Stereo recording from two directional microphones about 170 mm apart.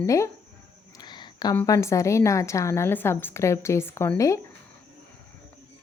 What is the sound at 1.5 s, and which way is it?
A woman's voice, 20° left (ahead or behind).